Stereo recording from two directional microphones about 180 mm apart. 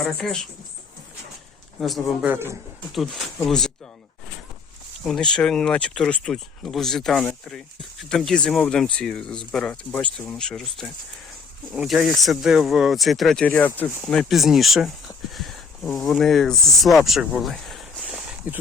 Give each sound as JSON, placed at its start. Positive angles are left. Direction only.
{"t": 0.0, "sound": "speech", "side_deg": 5}
{"t": 1.8, "sound": "speech", "side_deg": 0}
{"t": 2.3, "sound": "speech", "side_deg": -15}
{"t": 2.9, "sound": "speech", "side_deg": 0}
{"t": 5.0, "sound": "speech", "side_deg": 5}